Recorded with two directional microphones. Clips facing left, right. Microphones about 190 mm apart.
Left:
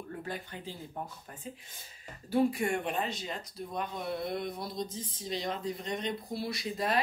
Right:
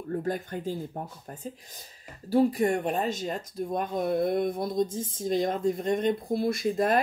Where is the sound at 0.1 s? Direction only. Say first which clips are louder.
Right 12 dB; 45° right (ahead or behind).